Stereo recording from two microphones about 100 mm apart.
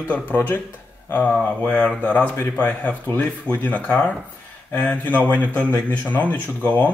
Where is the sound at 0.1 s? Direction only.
15° left (ahead or behind).